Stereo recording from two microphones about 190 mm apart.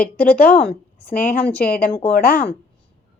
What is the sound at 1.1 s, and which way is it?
Speech, 50° left (ahead or behind).